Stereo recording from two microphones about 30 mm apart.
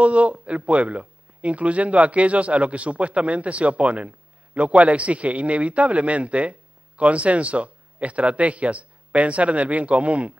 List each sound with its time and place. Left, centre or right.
0.0 s a man's voice: right